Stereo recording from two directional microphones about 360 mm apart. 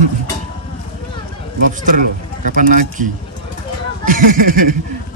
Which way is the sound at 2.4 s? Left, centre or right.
Right.